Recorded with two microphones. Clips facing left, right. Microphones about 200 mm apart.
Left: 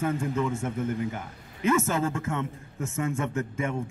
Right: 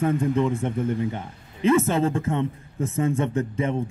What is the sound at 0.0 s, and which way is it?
A man's voice, 30° right (ahead or behind).